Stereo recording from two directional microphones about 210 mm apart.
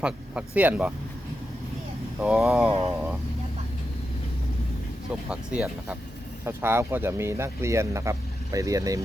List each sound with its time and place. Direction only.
0.0 s speech: 5° right (ahead or behind)
2.2 s speech: 5° right (ahead or behind)
5.3 s speech: 5° right (ahead or behind)